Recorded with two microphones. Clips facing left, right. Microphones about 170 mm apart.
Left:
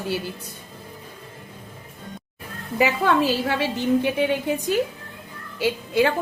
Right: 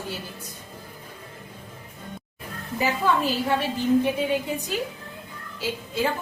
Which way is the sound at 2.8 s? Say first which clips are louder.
Left 4 dB; 85° left.